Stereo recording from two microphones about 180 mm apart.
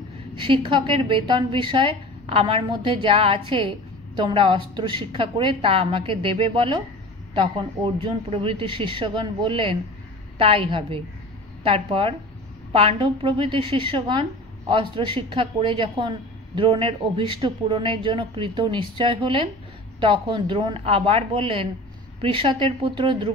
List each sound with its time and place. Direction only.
0.4 s a woman's voice: 30° right (ahead or behind)
7.8 s a woman's voice: 30° right (ahead or behind)